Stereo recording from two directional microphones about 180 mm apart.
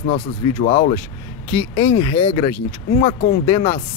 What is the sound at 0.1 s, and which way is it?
Speech, 30° left (ahead or behind).